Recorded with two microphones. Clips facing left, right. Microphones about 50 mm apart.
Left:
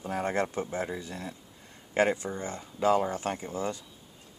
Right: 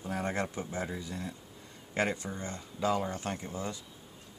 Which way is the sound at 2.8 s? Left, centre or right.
Left.